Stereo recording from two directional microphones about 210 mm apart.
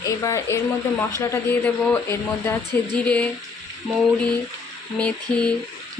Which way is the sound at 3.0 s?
5° left (ahead or behind).